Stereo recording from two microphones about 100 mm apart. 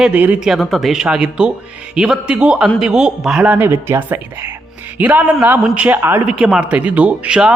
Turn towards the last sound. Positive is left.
turn(degrees=-10)  # may be behind; listen again after turning